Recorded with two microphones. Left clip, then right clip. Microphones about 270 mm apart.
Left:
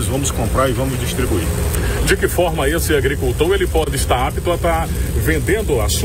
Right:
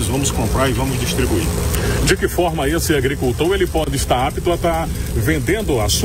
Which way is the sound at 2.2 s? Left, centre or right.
Right.